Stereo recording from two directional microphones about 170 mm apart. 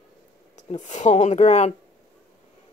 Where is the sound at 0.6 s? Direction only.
45° left (ahead or behind).